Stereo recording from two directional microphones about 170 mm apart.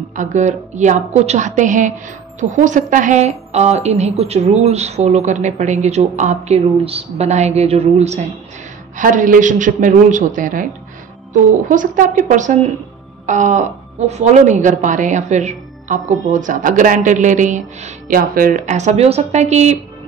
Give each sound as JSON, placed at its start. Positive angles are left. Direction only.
{"t": 0.1, "sound": "a woman's voice", "side_deg": -45}